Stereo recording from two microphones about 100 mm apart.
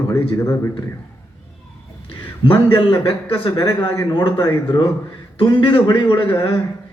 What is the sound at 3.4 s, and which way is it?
A man's voice, 45° left (ahead or behind).